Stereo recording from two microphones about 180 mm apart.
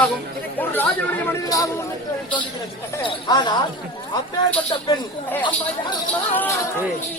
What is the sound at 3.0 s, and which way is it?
Speech, 25° left (ahead or behind).